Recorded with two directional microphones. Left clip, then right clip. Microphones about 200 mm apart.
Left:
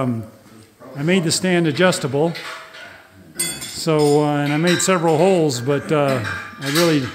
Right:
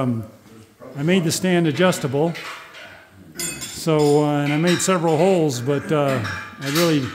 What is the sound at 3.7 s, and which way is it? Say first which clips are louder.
Speech: left 1 dB; centre (ahead or behind).